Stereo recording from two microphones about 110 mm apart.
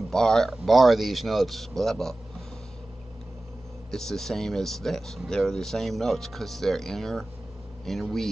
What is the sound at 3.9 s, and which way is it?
A man's voice, 5° left (ahead or behind).